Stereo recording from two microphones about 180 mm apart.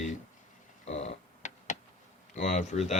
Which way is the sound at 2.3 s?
40° left (ahead or behind).